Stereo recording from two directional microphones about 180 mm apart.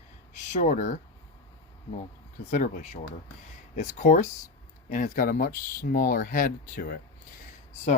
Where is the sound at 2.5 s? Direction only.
45° left (ahead or behind).